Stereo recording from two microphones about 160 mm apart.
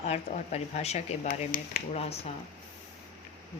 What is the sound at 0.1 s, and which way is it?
Speech, 45° left (ahead or behind).